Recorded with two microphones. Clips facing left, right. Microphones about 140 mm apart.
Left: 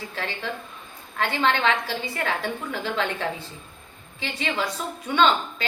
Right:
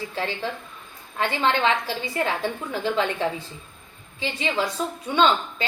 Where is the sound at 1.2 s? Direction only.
15° right (ahead or behind).